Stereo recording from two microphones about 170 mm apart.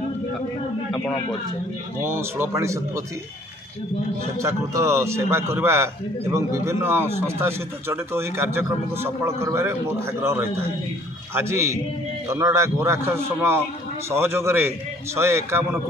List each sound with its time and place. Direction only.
2.0 s a man's voice: 15° right (ahead or behind)
4.4 s a man's voice: 15° right (ahead or behind)